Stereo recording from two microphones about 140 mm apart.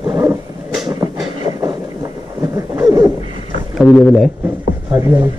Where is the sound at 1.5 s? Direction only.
25° right (ahead or behind).